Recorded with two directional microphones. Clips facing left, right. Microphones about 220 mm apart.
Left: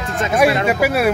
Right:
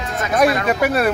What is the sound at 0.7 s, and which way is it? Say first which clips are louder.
Speech: left 1 dB; 5° left (ahead or behind).